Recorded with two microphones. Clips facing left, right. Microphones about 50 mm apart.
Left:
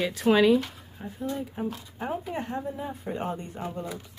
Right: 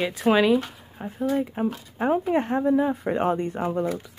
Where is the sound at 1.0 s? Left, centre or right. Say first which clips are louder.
Right 8 dB; right.